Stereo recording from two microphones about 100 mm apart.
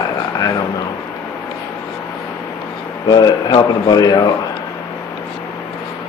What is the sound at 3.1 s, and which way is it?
A man's voice, 45° left (ahead or behind).